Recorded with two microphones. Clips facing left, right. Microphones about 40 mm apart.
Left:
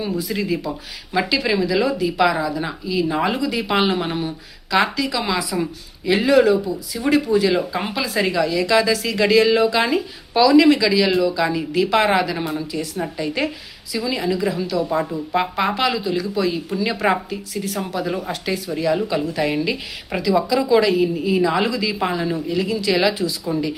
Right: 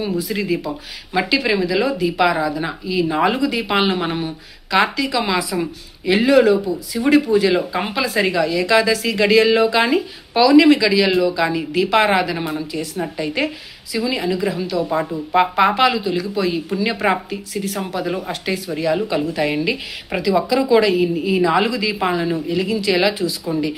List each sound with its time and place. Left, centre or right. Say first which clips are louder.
0.1 s a woman's voice: right 2 dB; centre